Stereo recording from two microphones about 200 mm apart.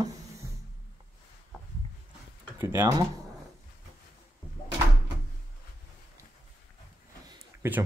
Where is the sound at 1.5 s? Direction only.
Centre (ahead or behind).